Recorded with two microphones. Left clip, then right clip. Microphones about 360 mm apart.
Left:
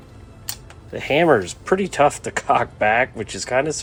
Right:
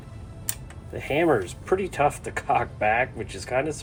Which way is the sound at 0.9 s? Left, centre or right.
Left.